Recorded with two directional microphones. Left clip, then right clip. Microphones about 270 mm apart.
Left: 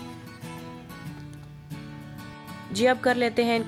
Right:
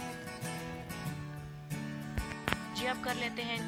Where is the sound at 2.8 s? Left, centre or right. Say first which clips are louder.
Left 18 dB; centre.